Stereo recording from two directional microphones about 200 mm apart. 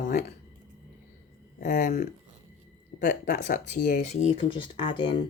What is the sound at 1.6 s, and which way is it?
Speech, 45° left (ahead or behind).